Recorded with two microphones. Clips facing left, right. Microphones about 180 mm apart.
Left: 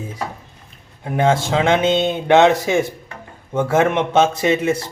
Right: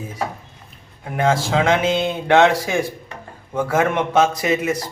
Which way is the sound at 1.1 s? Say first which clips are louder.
Left 2 dB; 25° left (ahead or behind).